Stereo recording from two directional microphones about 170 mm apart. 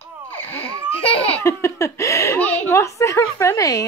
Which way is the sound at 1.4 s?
15° left (ahead or behind).